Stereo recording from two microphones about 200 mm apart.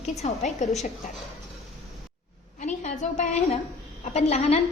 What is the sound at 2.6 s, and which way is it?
A woman's voice, 35° left (ahead or behind).